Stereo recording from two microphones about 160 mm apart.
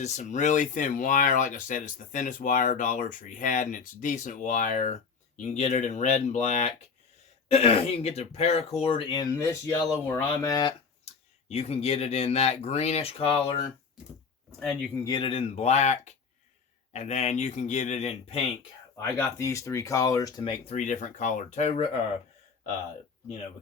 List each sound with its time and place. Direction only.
0.0 s speech: 45° left (ahead or behind); by 9.3 s 30° left (ahead or behind)
9.3 s speech: 15° left (ahead or behind)
11.0 s speech: 40° left (ahead or behind)
14.6 s speech: 5° left (ahead or behind)
15.0 s speech: 30° left (ahead or behind)
19.1 s speech: 20° left (ahead or behind); by 22.0 s 40° left (ahead or behind)